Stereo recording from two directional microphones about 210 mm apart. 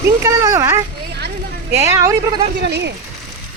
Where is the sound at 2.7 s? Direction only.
55° right (ahead or behind).